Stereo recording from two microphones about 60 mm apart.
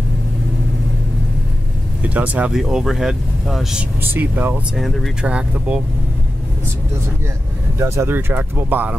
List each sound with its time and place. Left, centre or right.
2.0 s speech: right
2.5 s speech: centre
4.0 s speech: right
5.2 s speech: centre
7.8 s speech: right
8.1 s speech: right